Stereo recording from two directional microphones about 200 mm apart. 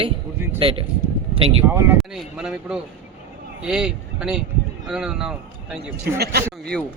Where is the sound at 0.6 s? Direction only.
30° right (ahead or behind).